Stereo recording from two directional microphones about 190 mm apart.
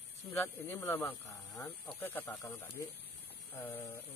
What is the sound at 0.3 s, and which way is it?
Speech, 10° left (ahead or behind).